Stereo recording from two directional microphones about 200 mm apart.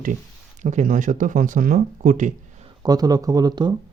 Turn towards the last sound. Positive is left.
turn(degrees=-20)  # may be behind; listen again after turning